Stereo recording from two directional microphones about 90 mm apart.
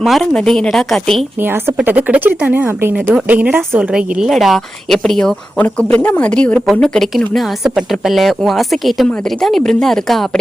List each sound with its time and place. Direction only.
0.0 s speech: 5° left (ahead or behind)
1.4 s a woman's voice: 25° right (ahead or behind)
3.9 s speech: 5° right (ahead or behind)
5.5 s speech: 15° left (ahead or behind)